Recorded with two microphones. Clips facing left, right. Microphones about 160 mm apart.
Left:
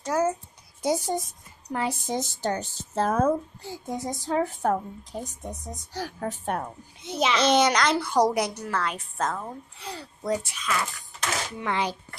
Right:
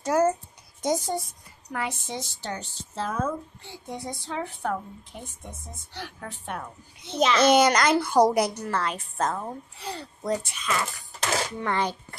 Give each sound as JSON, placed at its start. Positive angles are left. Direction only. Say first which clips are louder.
{"t": 0.0, "sound": "a woman's voice", "louder": "right 3 dB", "side_deg": 0}
{"t": 0.8, "sound": "a child's voice", "louder": "left 1 dB", "side_deg": 10}
{"t": 1.7, "sound": "speech", "louder": "left 4 dB", "side_deg": 30}
{"t": 7.1, "sound": "a child's voice", "louder": "right 2 dB", "side_deg": 10}
{"t": 7.4, "sound": "a woman's voice", "louder": "right 2 dB", "side_deg": -5}
{"t": 9.8, "sound": "a woman's voice", "louder": "right 2 dB", "side_deg": 0}